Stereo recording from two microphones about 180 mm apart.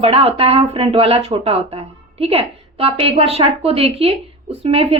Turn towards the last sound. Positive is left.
turn(degrees=-35)  # may be behind; listen again after turning